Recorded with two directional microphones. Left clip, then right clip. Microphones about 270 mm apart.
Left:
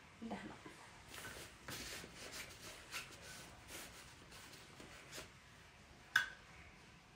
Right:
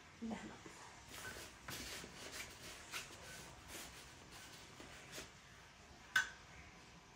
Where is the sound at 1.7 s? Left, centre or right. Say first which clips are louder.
Even; centre.